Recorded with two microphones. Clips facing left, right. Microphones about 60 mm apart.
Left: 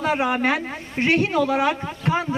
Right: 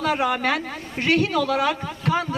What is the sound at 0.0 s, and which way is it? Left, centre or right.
A man's voice, left.